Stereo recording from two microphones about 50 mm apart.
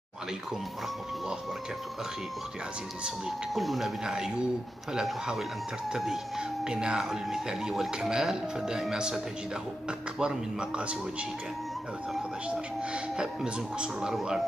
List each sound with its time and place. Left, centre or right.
3.5 s speech: centre
4.0 s speech: centre
5.9 s speech: centre
12.9 s speech: centre